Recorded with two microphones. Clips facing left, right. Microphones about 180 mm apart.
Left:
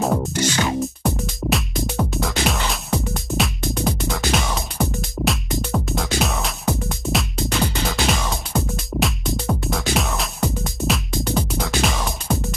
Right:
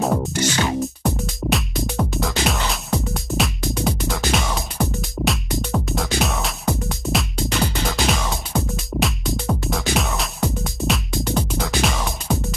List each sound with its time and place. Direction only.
0.0 s music: centre (ahead or behind)